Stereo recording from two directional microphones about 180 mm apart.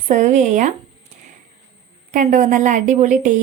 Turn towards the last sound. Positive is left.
turn(degrees=-45)  # may be behind; listen again after turning